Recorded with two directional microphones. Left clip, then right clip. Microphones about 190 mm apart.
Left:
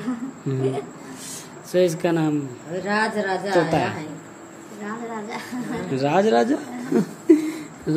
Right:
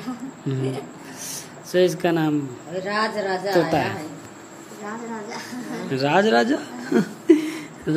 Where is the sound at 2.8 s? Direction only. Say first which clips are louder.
Left 1 dB; 55° left (ahead or behind).